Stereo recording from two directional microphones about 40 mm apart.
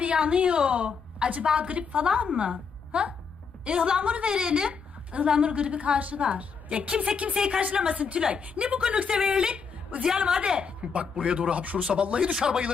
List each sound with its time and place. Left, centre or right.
0.0 s a woman's voice: right
4.0 s a woman's voice: right
4.3 s a woman's voice: right
7.9 s a woman's voice: right; by 9.5 s centre
9.9 s a woman's voice: right
10.2 s speech: centre